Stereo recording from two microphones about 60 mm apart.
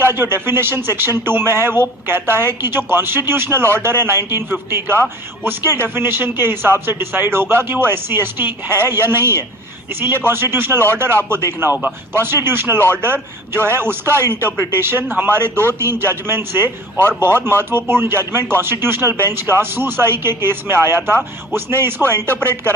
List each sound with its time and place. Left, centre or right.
0.0 s speech: right